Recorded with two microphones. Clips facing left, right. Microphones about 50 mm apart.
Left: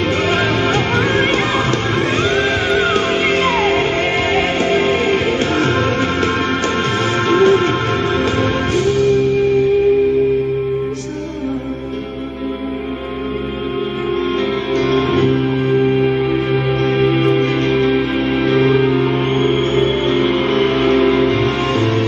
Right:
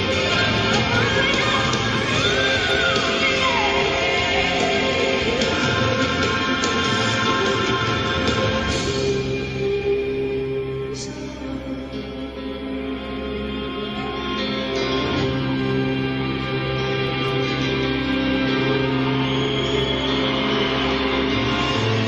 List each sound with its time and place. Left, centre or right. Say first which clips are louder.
0.3 s music: left 5 dB; left
14.9 s music: left 10 dB; left
20.4 s gong: left 6 dB; centre
21.0 s music: left 8 dB; centre